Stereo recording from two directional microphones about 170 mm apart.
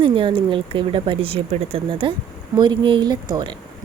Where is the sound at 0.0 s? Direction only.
30° right (ahead or behind).